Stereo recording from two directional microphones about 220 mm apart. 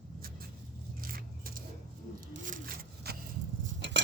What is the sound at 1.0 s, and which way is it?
Vehicle, 40° right (ahead or behind).